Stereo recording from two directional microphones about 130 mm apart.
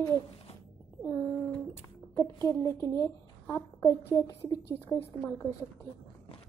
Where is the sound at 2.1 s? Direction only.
25° left (ahead or behind).